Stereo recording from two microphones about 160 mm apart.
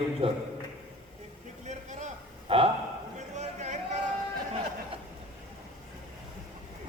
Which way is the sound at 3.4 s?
45° right (ahead or behind).